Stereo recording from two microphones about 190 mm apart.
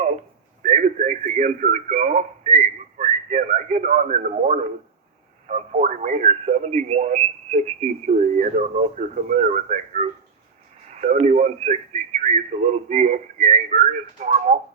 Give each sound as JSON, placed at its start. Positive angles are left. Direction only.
{"t": 0.6, "sound": "radio", "side_deg": -40}
{"t": 3.0, "sound": "a man's voice", "side_deg": -35}